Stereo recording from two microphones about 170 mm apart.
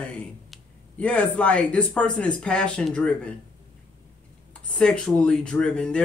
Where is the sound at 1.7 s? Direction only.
5° left (ahead or behind).